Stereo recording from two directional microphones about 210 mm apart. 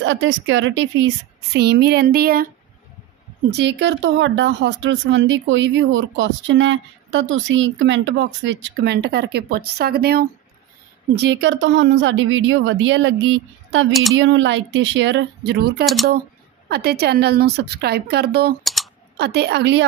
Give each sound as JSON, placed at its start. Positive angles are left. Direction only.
{"t": 0.0, "sound": "a woman's voice", "side_deg": -60}
{"t": 3.5, "sound": "speech", "side_deg": -55}
{"t": 15.8, "sound": "speech", "side_deg": 0}
{"t": 16.6, "sound": "a woman's voice", "side_deg": -50}
{"t": 18.6, "sound": "typing", "side_deg": 0}
{"t": 19.1, "sound": "a woman's voice", "side_deg": -50}